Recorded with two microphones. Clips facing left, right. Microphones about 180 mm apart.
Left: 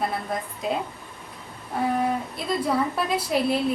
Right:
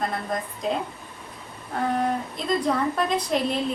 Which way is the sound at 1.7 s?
5° left (ahead or behind).